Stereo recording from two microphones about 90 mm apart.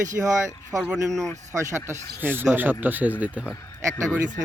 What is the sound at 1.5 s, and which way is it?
Speech, 35° right (ahead or behind).